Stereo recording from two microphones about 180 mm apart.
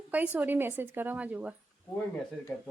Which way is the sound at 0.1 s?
10° right (ahead or behind).